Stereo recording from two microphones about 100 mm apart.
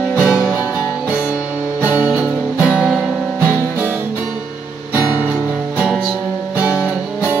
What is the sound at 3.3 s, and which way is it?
Music, 20° right (ahead or behind).